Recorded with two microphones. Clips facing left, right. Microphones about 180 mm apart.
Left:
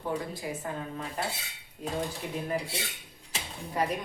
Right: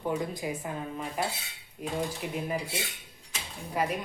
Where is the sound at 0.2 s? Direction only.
20° right (ahead or behind).